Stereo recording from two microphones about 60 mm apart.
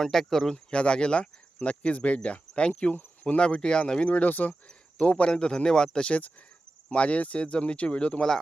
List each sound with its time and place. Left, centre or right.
0.0 s speech: centre
6.1 s speech: left